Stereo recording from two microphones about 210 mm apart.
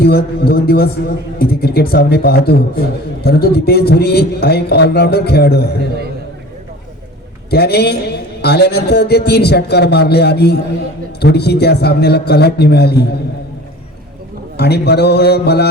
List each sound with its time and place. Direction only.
0.0 s a man's voice: 50° left (ahead or behind)
7.5 s a man's voice: 50° left (ahead or behind)
14.5 s a man's voice: 50° left (ahead or behind)